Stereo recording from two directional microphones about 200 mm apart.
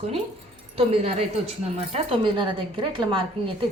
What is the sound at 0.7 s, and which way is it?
A woman's voice, 30° right (ahead or behind).